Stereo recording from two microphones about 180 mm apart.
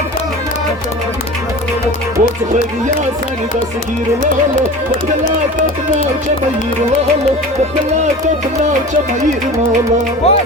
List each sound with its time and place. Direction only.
10.2 s speech: 35° left (ahead or behind)